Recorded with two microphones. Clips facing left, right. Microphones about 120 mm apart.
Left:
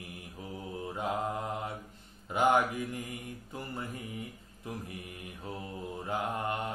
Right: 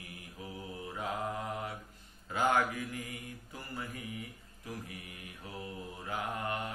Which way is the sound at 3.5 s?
25° left (ahead or behind).